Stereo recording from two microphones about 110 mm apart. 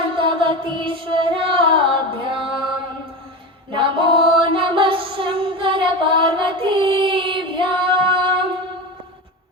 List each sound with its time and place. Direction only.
0.0 s music: 50° right (ahead or behind)
3.7 s female singing: 50° right (ahead or behind)